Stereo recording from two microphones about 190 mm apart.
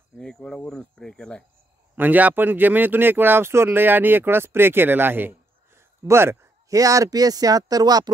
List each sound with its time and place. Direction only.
0.1 s speech: 5° left (ahead or behind)
2.0 s speech: 10° right (ahead or behind)